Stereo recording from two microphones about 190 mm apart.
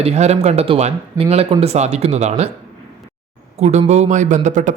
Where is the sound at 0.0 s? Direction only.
35° right (ahead or behind).